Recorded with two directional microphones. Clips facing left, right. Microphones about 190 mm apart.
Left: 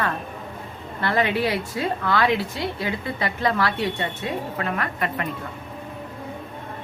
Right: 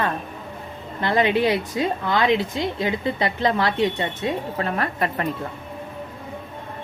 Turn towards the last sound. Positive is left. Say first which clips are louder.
# right 3 dB
turn(degrees=-35)  # may be behind; listen again after turning